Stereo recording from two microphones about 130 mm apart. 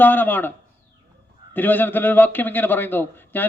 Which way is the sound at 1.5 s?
15° left (ahead or behind).